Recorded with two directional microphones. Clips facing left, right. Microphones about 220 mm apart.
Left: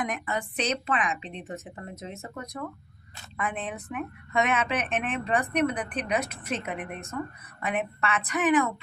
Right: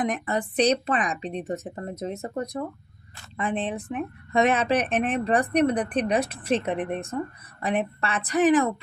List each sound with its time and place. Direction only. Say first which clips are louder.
0.0 s speech: right 5 dB; 35° right (ahead or behind)